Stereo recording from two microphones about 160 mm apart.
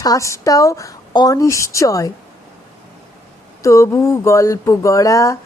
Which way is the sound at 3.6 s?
20° left (ahead or behind).